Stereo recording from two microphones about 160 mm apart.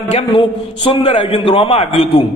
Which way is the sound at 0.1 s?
40° left (ahead or behind).